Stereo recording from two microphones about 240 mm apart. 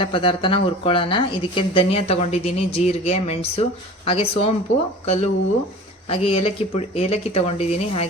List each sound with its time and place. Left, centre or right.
0.0 s speech: left